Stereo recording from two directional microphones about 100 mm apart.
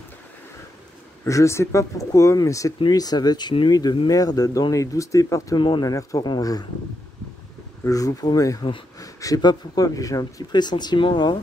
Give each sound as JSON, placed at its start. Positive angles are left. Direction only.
{"t": 1.2, "sound": "speech", "side_deg": 30}
{"t": 5.6, "sound": "speech", "side_deg": 45}
{"t": 7.8, "sound": "speech", "side_deg": 35}